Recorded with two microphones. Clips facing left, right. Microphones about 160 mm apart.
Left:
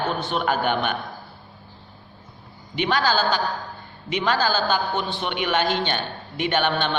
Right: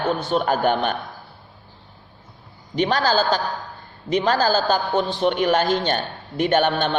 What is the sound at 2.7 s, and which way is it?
A man's voice, 40° right (ahead or behind).